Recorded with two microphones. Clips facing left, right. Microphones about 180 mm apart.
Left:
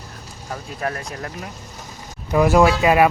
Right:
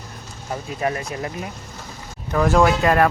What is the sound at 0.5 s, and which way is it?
Speech, 5° right (ahead or behind).